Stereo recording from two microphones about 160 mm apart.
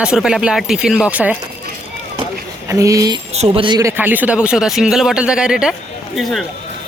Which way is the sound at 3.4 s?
30° right (ahead or behind).